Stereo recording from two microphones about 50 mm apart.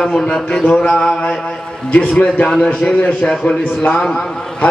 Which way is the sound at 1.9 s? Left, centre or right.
Left.